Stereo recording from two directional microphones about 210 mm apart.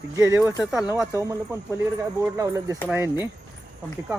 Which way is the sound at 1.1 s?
15° right (ahead or behind).